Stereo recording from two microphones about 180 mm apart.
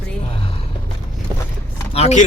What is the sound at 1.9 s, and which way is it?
Speech, 40° left (ahead or behind).